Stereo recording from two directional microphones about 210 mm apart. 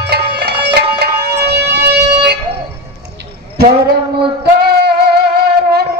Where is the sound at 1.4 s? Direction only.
50° right (ahead or behind).